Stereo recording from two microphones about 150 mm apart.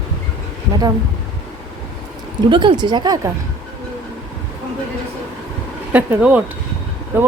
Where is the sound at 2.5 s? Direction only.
30° right (ahead or behind).